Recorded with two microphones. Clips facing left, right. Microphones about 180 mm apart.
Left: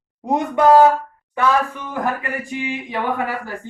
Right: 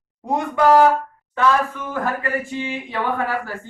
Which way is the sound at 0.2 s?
20° left (ahead or behind).